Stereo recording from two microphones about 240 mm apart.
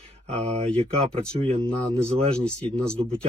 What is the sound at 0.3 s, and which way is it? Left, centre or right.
Speech, right.